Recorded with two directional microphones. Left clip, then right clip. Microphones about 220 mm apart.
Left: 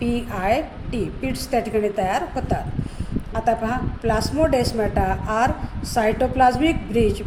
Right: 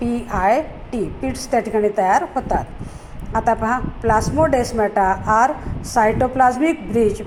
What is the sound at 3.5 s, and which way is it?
Speech, 5° right (ahead or behind).